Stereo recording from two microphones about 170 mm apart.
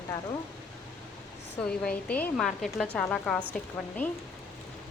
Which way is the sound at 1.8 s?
5° left (ahead or behind).